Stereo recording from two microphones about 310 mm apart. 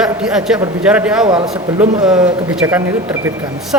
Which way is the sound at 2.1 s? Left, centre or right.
Centre.